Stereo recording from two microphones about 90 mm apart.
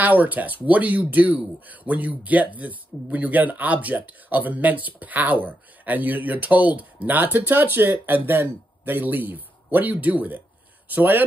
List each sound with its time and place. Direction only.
0.0 s speech: 20° right (ahead or behind)